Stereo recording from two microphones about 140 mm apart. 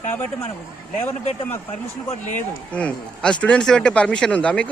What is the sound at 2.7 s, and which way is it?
Speech, 10° left (ahead or behind).